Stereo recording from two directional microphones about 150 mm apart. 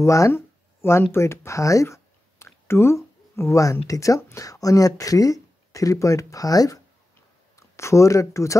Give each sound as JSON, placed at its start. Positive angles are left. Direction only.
{"t": 0.0, "sound": "speech", "side_deg": 20}